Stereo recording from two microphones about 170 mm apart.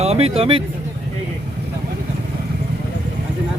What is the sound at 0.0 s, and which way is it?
Speech, 35° right (ahead or behind).